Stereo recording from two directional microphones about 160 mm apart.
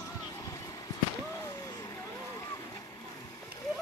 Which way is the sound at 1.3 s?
20° left (ahead or behind).